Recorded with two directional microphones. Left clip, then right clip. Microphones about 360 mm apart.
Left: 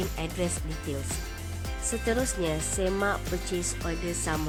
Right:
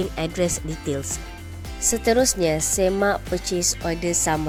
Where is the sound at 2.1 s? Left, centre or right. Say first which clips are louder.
Right 10 dB; centre.